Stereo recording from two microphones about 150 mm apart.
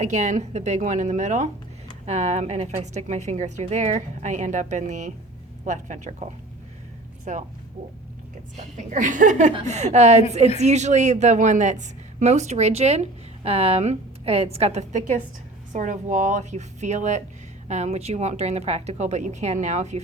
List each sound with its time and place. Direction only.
0.0 s a woman's voice: 50° right (ahead or behind)
7.3 s speech: 55° right (ahead or behind)
8.5 s a woman's voice: 55° right (ahead or behind)